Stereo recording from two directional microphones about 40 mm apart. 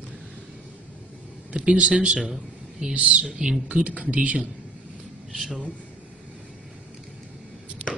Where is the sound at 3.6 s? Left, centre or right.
Right.